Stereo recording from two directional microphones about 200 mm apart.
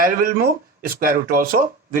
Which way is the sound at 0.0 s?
45° right (ahead or behind).